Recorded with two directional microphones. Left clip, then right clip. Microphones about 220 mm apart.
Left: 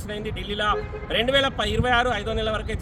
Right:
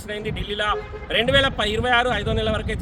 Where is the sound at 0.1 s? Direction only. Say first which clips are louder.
Right 3 dB; 10° right (ahead or behind).